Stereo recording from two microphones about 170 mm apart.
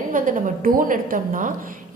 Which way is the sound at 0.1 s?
55° right (ahead or behind).